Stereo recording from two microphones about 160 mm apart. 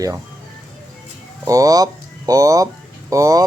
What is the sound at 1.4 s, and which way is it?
Speech, 20° right (ahead or behind).